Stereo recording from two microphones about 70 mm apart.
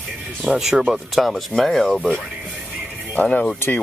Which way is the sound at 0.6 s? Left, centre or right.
Centre.